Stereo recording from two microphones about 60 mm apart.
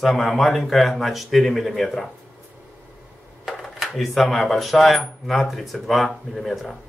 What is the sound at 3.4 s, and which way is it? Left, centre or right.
Speech, centre.